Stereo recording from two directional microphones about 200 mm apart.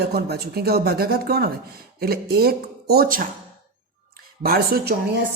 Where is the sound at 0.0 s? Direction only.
55° right (ahead or behind).